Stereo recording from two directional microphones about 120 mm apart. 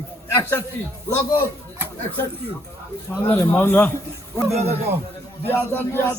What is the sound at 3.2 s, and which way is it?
Speech, 15° left (ahead or behind).